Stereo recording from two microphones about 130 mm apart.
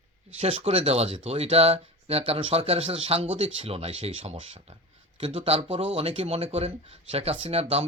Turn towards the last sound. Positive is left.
turn(degrees=-50)  # may be behind; listen again after turning